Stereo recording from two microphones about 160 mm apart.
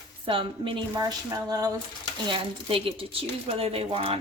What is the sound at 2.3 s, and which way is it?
Speech, 35° right (ahead or behind).